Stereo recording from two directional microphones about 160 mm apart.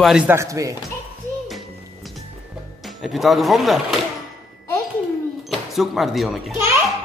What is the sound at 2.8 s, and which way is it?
Speech, centre (ahead or behind).